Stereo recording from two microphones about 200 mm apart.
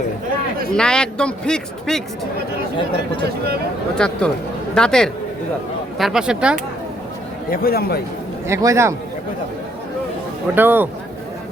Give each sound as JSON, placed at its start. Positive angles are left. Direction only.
{"t": 0.7, "sound": "a man's voice", "side_deg": 5}
{"t": 3.9, "sound": "a man's voice", "side_deg": 5}
{"t": 7.5, "sound": "speech", "side_deg": 50}
{"t": 8.4, "sound": "a man's voice", "side_deg": -15}
{"t": 10.5, "sound": "a man's voice", "side_deg": -10}